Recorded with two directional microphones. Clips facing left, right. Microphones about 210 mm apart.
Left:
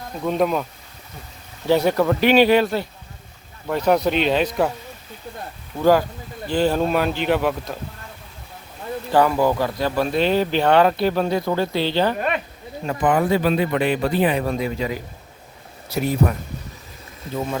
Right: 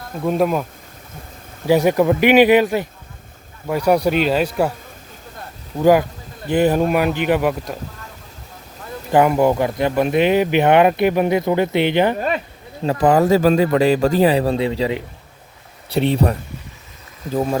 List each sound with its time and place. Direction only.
0.3 s speech: 5° right (ahead or behind)
1.6 s speech: 15° right (ahead or behind)
6.5 s speech: 20° right (ahead or behind)
9.1 s speech: 20° right (ahead or behind)
12.8 s speech: 35° right (ahead or behind)
17.3 s speech: 40° right (ahead or behind)